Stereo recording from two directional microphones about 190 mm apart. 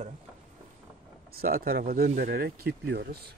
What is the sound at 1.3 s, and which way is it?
Speech, 50° right (ahead or behind).